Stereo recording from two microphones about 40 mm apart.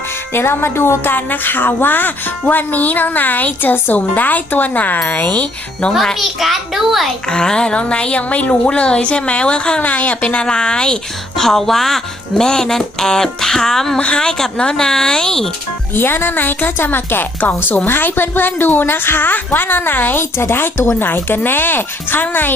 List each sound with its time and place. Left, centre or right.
0.3 s music: left
1.1 s speech: left
6.1 s a child's voice: centre
7.3 s a woman's voice: left
10.5 s a woman's voice: left
11.3 s speech: centre
16.0 s a woman's voice: left
20.9 s a woman's voice: left